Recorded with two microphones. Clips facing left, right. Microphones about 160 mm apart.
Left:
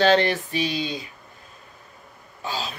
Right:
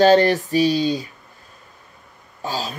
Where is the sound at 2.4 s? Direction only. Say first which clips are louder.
Right 4 dB; 40° right (ahead or behind).